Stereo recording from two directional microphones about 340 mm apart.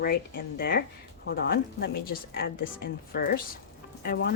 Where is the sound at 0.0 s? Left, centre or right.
Left.